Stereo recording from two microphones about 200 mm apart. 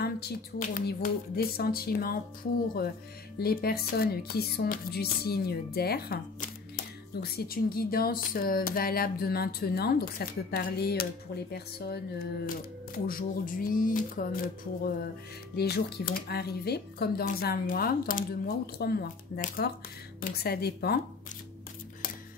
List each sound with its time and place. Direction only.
0.0 s speech: 50° left (ahead or behind)
3.3 s speech: 50° left (ahead or behind)
15.5 s speech: 50° left (ahead or behind)